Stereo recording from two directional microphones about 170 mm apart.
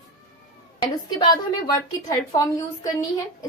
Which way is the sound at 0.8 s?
25° left (ahead or behind).